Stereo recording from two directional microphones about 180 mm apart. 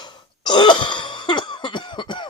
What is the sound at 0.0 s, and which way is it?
Cough, 25° left (ahead or behind).